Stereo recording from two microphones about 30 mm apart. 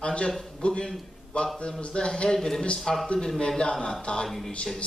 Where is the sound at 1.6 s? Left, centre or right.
Left; by 3.4 s centre.